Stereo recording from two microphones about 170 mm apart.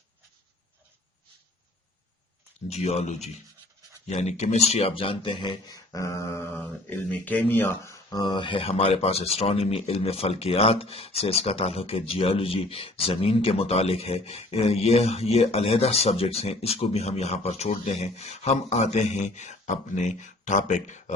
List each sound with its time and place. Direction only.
2.6 s speech: 40° left (ahead or behind); by 7.9 s 10° left (ahead or behind)
8.1 s speech: 25° left (ahead or behind); by 21.0 s 45° left (ahead or behind)